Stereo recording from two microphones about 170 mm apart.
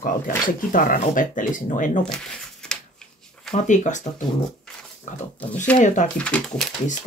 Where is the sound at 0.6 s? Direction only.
55° left (ahead or behind).